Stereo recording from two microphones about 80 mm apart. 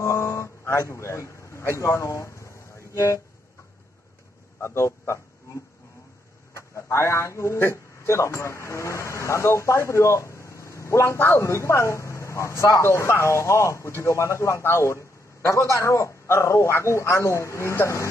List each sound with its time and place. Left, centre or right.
0.0 s a sound: left
2.9 s speech: left
4.6 s a man's voice: left
6.5 s a man's voice: left